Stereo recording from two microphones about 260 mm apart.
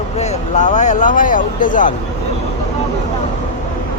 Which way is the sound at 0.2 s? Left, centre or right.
Left.